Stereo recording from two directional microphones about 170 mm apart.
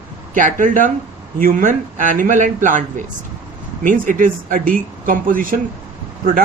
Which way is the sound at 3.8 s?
50° right (ahead or behind).